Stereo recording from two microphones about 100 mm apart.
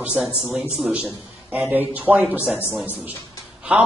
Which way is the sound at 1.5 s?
20° right (ahead or behind).